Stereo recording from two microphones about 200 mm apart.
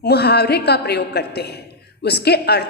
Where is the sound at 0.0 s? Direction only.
55° left (ahead or behind).